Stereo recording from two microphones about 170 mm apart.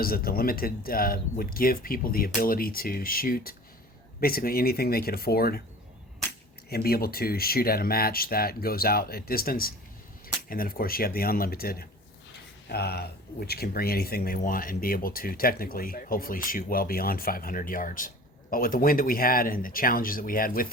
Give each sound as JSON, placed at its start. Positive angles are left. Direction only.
{"t": 0.0, "sound": "speech", "side_deg": 60}
{"t": 6.7, "sound": "speech", "side_deg": 65}